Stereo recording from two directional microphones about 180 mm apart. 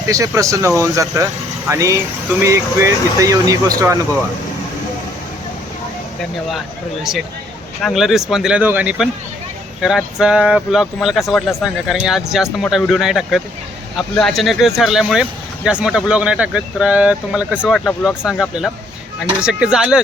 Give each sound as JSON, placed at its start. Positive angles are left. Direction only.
{"t": 0.0, "sound": "speech", "side_deg": -20}
{"t": 7.8, "sound": "speech", "side_deg": 0}
{"t": 17.7, "sound": "speech", "side_deg": 5}
{"t": 18.3, "sound": "speech", "side_deg": 0}